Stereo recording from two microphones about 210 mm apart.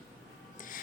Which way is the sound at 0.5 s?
40° left (ahead or behind).